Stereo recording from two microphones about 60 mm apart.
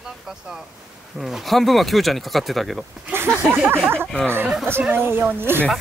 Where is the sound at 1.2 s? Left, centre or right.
Centre.